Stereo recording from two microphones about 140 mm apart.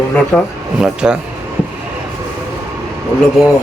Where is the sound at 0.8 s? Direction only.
5° right (ahead or behind).